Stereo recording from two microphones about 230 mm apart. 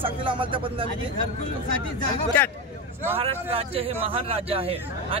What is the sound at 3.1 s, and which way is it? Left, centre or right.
Speech, right.